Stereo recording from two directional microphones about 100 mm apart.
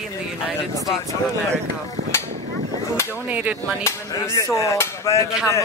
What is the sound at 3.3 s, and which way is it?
Speech, 15° right (ahead or behind).